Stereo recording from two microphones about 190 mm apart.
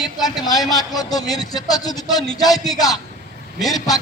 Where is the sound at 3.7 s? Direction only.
20° left (ahead or behind).